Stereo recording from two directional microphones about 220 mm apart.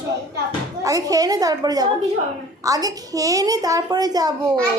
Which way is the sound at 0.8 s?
15° right (ahead or behind).